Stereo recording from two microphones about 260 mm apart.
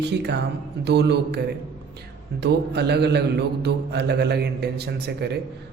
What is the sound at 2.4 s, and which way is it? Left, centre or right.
Mantra, right.